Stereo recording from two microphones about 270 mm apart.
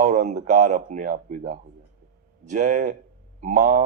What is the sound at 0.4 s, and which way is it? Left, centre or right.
Speech, right.